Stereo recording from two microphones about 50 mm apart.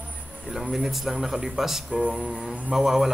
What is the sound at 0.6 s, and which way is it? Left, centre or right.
A man's voice, centre.